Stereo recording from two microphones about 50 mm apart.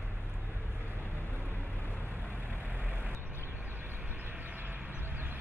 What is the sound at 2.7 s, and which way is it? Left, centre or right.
Vehicle, right.